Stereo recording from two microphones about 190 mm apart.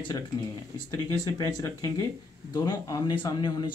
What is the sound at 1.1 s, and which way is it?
Speech, 15° left (ahead or behind).